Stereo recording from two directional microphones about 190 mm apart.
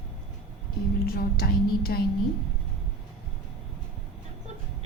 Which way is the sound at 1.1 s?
50° left (ahead or behind).